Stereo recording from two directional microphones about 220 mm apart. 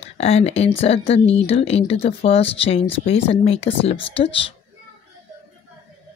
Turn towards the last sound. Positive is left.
turn(degrees=25)  # may be behind; listen again after turning